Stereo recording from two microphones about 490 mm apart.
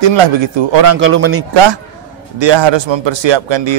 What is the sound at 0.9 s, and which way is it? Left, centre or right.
Speech, right.